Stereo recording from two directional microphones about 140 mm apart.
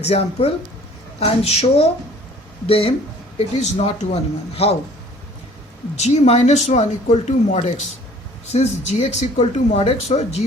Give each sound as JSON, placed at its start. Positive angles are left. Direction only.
{"t": 0.0, "sound": "speech", "side_deg": 50}
{"t": 3.3, "sound": "speech", "side_deg": 55}
{"t": 6.0, "sound": "speech", "side_deg": 50}